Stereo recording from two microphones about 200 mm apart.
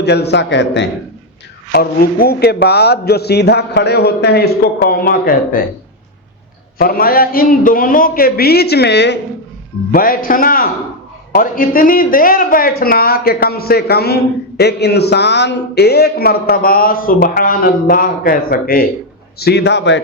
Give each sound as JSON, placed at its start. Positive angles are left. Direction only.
{"t": 0.0, "sound": "a man's voice", "side_deg": 55}
{"t": 1.7, "sound": "a man's voice", "side_deg": 50}
{"t": 6.7, "sound": "a man's voice", "side_deg": 45}
{"t": 9.9, "sound": "a man's voice", "side_deg": 45}